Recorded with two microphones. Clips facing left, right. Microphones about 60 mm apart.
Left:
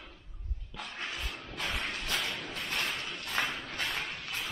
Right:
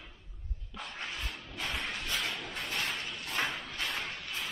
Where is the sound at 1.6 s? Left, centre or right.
Centre.